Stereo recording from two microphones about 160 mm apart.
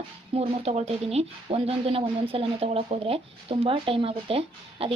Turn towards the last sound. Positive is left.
turn(degrees=-35)  # may be behind; listen again after turning